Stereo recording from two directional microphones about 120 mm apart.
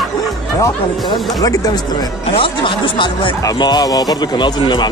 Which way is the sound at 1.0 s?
35° left (ahead or behind).